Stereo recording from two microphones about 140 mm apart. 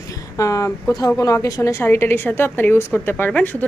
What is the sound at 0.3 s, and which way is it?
A woman's voice, 25° left (ahead or behind).